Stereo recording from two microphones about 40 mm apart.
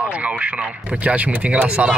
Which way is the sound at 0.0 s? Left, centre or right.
Right.